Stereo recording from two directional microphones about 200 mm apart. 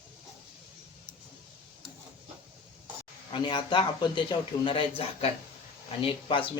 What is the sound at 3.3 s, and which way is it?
A man's voice, 25° left (ahead or behind).